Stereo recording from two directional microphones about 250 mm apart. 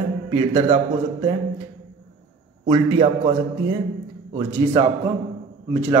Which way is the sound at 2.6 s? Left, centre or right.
Right.